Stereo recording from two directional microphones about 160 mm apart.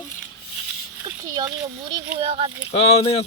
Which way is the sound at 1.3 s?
25° right (ahead or behind).